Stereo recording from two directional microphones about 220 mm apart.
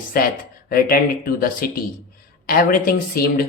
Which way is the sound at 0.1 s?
40° left (ahead or behind).